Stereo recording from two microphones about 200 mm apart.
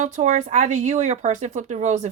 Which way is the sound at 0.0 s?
35° right (ahead or behind).